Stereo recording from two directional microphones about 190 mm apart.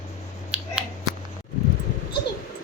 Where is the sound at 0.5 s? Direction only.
5° right (ahead or behind).